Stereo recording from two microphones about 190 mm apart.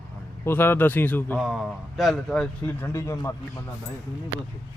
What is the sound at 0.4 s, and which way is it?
Speech, 10° left (ahead or behind).